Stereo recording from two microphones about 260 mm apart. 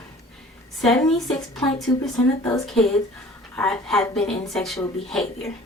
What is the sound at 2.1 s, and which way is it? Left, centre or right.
Speech, centre.